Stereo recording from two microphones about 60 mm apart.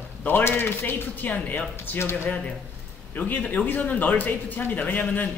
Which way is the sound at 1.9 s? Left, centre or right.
Left.